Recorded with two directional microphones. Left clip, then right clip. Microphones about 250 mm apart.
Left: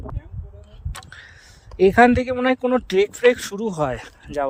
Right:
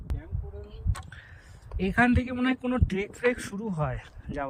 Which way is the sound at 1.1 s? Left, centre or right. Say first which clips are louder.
Left 7 dB; left.